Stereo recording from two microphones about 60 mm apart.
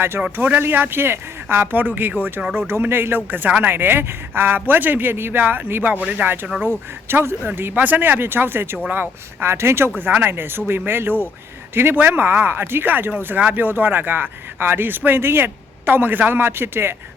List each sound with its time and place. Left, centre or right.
0.2 s speech: centre
0.6 s speech: right
6.2 s speech: right
10.0 s speech: right